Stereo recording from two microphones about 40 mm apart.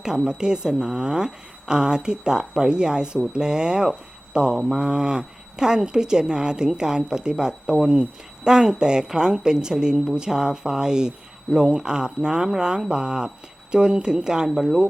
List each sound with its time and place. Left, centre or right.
0.3 s a woman's voice: centre